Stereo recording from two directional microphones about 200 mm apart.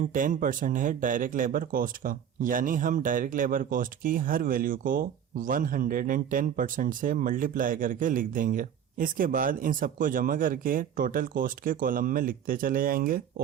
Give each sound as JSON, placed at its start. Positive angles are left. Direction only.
{"t": 0.0, "sound": "speech", "side_deg": -40}